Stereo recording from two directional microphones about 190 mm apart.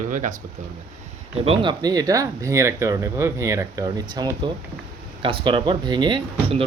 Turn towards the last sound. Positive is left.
turn(degrees=-30)  # may be behind; listen again after turning